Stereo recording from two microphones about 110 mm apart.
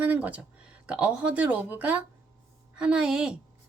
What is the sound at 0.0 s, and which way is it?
Speech, 15° right (ahead or behind).